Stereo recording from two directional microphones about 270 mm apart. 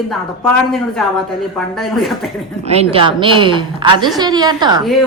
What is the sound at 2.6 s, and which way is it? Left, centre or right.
A woman's voice, right.